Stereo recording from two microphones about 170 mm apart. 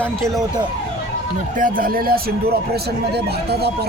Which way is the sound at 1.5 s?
55° right (ahead or behind).